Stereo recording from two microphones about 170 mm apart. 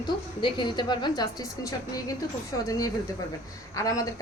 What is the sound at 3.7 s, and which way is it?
Speech, 20° left (ahead or behind).